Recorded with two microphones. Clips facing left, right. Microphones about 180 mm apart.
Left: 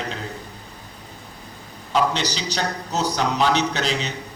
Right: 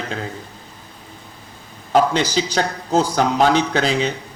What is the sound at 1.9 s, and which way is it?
Speech, 50° right (ahead or behind).